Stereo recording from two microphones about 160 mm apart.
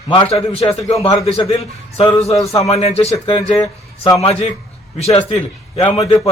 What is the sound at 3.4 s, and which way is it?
Speech, 20° left (ahead or behind).